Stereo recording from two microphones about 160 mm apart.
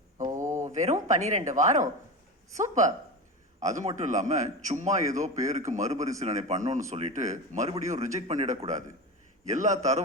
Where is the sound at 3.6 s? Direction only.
50° right (ahead or behind).